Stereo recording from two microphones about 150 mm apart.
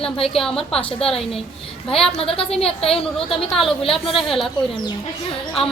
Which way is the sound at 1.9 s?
5° left (ahead or behind).